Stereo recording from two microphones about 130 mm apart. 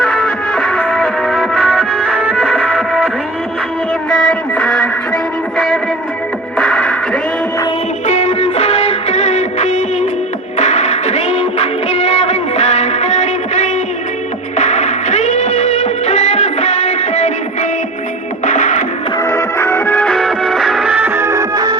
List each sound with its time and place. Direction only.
0.2 s music: 5° left (ahead or behind)
4.3 s music: 10° left (ahead or behind)
6.6 s music: 10° left (ahead or behind)
8.0 s music: 65° left (ahead or behind)
19.2 s music: 20° left (ahead or behind)
19.9 s music: 5° left (ahead or behind); by 21.8 s 30° right (ahead or behind)